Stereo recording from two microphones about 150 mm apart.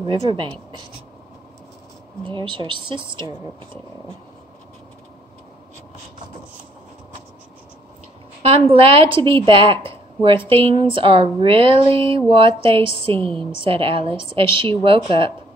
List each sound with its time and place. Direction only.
0.3 s a woman's voice: 35° right (ahead or behind)
2.2 s a woman's voice: 30° right (ahead or behind)
8.4 s a woman's voice: 40° right (ahead or behind)